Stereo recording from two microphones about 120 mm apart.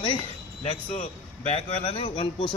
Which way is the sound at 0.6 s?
60° left (ahead or behind).